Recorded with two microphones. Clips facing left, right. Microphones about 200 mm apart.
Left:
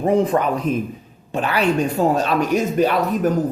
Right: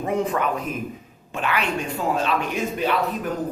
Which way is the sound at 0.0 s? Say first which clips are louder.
Left 6 dB; 35° left (ahead or behind).